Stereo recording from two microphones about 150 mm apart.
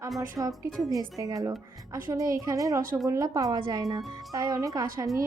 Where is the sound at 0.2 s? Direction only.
25° right (ahead or behind).